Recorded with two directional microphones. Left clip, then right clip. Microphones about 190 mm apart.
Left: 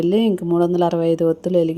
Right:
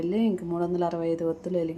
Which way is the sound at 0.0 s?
45° left (ahead or behind).